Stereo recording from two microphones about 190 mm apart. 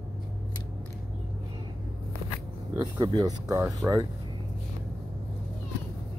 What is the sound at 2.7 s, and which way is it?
Speech, 20° right (ahead or behind).